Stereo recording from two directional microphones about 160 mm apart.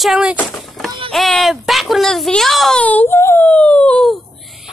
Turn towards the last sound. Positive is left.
turn(degrees=5)  # may be behind; listen again after turning